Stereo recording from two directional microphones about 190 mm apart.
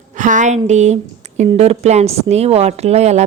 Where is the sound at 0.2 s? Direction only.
40° right (ahead or behind).